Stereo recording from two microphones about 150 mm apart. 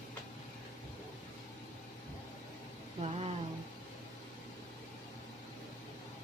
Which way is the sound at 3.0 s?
45° right (ahead or behind).